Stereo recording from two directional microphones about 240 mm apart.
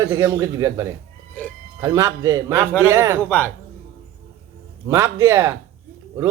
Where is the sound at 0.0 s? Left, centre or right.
Centre.